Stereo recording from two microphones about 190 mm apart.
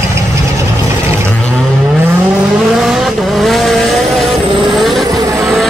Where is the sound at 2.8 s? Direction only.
Centre (ahead or behind).